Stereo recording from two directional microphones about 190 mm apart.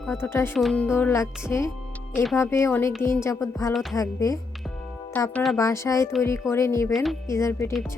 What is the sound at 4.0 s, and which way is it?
Speech, 15° left (ahead or behind).